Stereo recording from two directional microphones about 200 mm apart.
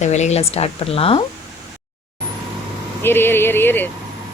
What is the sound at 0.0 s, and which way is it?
Speech, 35° left (ahead or behind).